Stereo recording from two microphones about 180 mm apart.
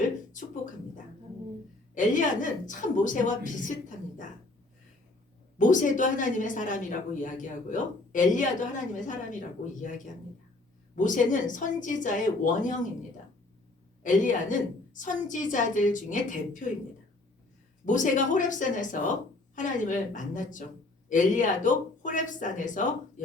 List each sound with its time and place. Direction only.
0.3 s a woman's voice: 45° left (ahead or behind)
5.5 s a woman's voice: 45° left (ahead or behind)
10.9 s a woman's voice: 45° left (ahead or behind)
14.0 s a woman's voice: 45° left (ahead or behind)
17.8 s a woman's voice: 45° left (ahead or behind)